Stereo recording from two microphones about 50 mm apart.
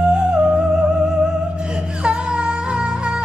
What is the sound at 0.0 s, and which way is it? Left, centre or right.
Music, centre.